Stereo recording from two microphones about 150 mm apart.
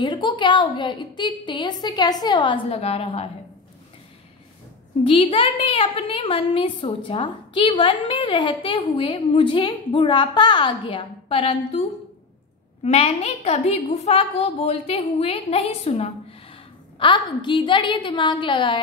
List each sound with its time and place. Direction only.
0.0 s a woman's voice: 30° left (ahead or behind)
5.0 s a woman's voice: 35° left (ahead or behind)
12.8 s a woman's voice: 45° left (ahead or behind)